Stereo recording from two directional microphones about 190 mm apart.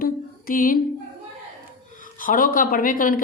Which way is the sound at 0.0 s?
45° left (ahead or behind).